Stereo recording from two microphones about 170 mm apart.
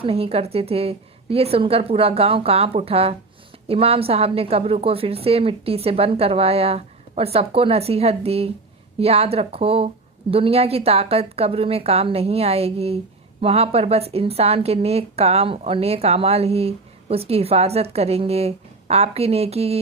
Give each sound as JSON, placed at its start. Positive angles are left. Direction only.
{"t": 0.0, "sound": "a woman's voice", "side_deg": -35}